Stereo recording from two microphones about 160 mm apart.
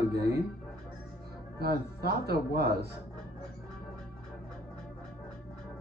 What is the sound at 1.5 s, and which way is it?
Speech, 85° right.